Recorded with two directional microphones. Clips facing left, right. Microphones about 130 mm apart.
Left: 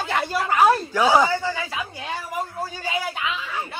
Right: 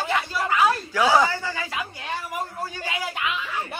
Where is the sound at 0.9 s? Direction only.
20° left (ahead or behind).